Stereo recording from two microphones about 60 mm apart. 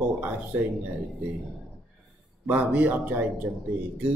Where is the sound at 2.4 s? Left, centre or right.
Right.